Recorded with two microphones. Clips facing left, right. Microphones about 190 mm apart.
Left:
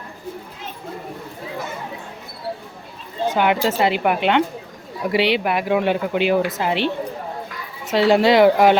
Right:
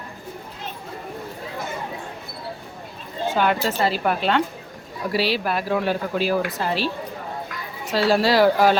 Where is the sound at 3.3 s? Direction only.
15° left (ahead or behind).